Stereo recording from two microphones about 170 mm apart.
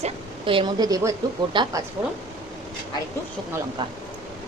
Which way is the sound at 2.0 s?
10° right (ahead or behind).